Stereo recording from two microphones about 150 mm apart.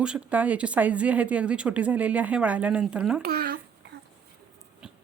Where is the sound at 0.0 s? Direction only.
10° right (ahead or behind).